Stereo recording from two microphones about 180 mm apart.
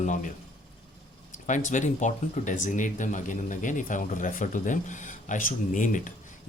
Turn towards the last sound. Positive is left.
turn(degrees=45)  # may be behind; listen again after turning